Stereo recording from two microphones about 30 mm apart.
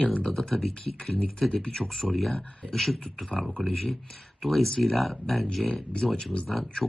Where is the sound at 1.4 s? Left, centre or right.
Centre.